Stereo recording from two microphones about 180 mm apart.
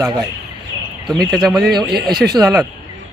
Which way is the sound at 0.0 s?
20° right (ahead or behind).